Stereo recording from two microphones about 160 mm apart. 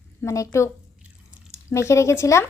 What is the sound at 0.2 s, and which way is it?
Speech, 15° left (ahead or behind).